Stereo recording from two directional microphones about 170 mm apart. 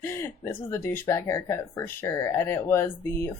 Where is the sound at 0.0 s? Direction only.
15° left (ahead or behind).